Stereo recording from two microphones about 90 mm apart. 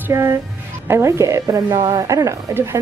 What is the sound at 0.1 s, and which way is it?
Speech, 30° right (ahead or behind).